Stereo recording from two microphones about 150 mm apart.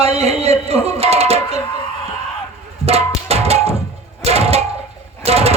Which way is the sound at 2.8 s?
45° right (ahead or behind).